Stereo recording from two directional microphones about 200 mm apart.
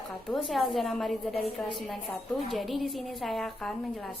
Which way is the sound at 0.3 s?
Centre (ahead or behind).